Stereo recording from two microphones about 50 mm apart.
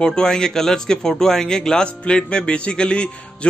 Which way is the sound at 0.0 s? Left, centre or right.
Centre.